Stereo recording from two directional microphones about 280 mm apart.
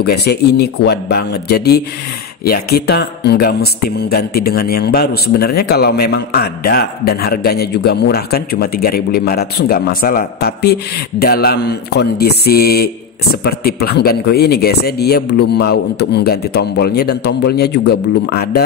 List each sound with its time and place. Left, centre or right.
0.0 s a man's voice: left